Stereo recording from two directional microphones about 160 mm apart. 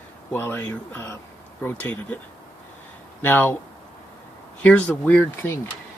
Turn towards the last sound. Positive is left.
turn(degrees=10)  # may be behind; listen again after turning